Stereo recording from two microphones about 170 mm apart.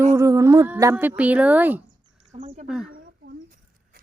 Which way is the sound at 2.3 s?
40° right (ahead or behind).